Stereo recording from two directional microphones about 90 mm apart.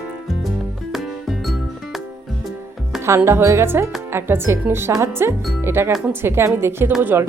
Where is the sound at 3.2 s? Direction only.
30° right (ahead or behind).